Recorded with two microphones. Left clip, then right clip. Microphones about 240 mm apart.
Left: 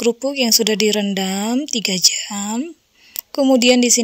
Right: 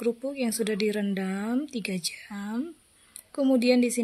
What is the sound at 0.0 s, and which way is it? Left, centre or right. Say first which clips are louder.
A woman's voice: left 11 dB; left.